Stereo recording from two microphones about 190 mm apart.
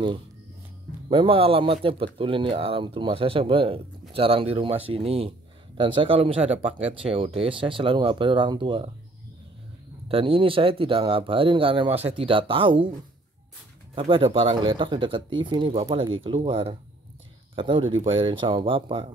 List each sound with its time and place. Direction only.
1.0 s speech: 30° right (ahead or behind)
10.0 s speech: 30° right (ahead or behind)
13.9 s speech: 25° right (ahead or behind)